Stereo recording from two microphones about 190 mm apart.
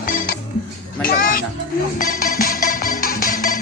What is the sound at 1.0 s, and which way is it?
Speech, 45° left (ahead or behind).